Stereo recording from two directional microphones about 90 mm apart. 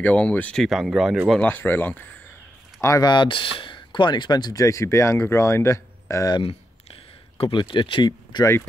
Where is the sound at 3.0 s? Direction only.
60° left (ahead or behind); by 6.3 s 35° left (ahead or behind).